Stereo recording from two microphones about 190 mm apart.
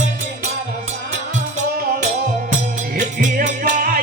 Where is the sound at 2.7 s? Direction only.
50° right (ahead or behind).